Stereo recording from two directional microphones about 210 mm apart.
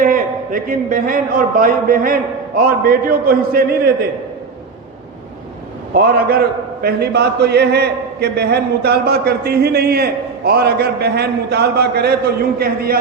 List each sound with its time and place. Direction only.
0.0 s a man's voice: 40° right (ahead or behind)
6.8 s a man's voice: 50° right (ahead or behind)